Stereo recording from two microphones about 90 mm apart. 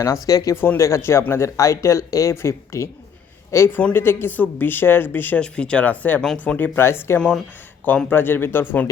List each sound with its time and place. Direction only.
0.0 s speech: 40° left (ahead or behind)
3.8 s speech: 20° left (ahead or behind)
5.4 s speech: 10° left (ahead or behind); by 7.2 s 25° left (ahead or behind)
7.2 s speech: 5° left (ahead or behind)
7.9 s speech: 20° left (ahead or behind)